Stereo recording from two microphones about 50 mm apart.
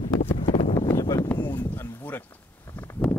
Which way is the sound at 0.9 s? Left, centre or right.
Left.